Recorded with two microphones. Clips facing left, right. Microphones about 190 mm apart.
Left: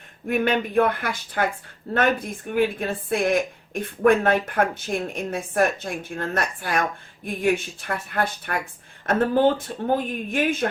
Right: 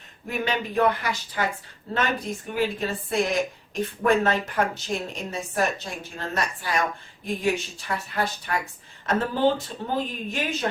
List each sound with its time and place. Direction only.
0.3 s a woman's voice: 55° left (ahead or behind)
2.5 s a woman's voice: 55° left (ahead or behind)